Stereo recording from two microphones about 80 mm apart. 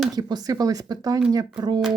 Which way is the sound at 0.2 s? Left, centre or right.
Right.